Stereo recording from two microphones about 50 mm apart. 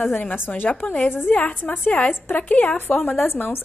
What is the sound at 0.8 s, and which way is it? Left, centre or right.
Speech, left.